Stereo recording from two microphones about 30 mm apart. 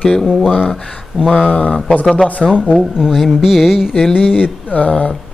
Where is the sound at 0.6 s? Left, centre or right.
Centre.